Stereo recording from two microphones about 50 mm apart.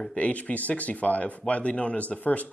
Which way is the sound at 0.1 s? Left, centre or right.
Left.